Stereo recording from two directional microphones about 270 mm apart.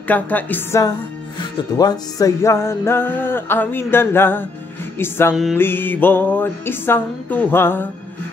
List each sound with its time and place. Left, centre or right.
0.1 s music: centre